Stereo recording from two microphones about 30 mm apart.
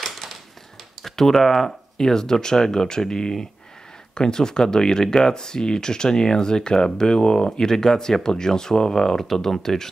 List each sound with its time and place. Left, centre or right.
0.0 s a sound: centre
1.0 s speech: centre
1.7 s speech: centre